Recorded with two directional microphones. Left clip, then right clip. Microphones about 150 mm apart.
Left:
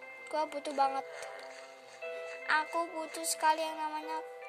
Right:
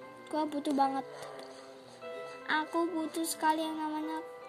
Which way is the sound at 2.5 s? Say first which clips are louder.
Even; 25° left (ahead or behind).